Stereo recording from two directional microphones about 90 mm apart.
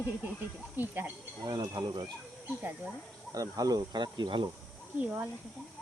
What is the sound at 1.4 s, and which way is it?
Speech, 50° right (ahead or behind).